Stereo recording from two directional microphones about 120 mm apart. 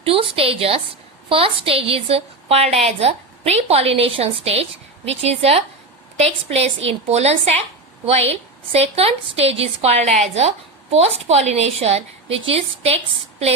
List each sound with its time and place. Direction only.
0.0 s a woman's voice: 50° right (ahead or behind)